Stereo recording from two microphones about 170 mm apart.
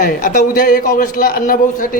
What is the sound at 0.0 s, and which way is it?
A man's voice, 50° left (ahead or behind).